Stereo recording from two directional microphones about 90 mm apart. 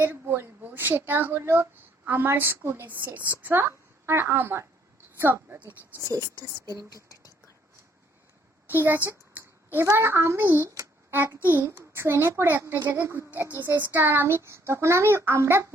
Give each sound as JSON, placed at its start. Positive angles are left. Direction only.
{"t": 0.0, "sound": "a woman's voice", "side_deg": -20}
{"t": 6.1, "sound": "a woman's voice", "side_deg": -35}
{"t": 6.9, "sound": "whispering", "side_deg": 40}
{"t": 8.6, "sound": "a woman's voice", "side_deg": -25}
{"t": 11.6, "sound": "a child's voice", "side_deg": -35}